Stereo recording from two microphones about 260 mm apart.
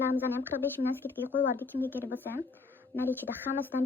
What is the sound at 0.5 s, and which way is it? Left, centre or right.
Speech, left.